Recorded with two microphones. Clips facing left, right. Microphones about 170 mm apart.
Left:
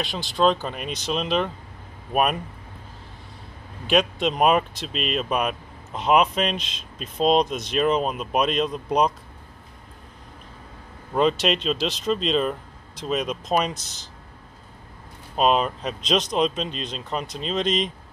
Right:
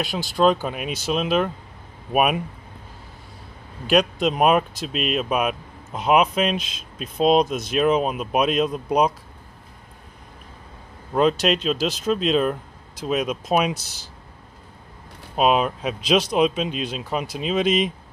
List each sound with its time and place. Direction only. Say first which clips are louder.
0.0 s speech: right 2 dB; 5° right (ahead or behind)
3.8 s speech: right 2 dB; centre (ahead or behind)
11.1 s speech: right 2 dB; centre (ahead or behind)
15.3 s speech: right 1 dB; 5° right (ahead or behind)